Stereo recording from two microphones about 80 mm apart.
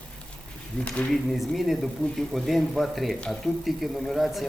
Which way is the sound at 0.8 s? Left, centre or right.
Centre.